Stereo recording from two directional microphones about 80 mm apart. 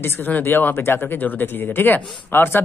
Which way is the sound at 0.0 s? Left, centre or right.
Left.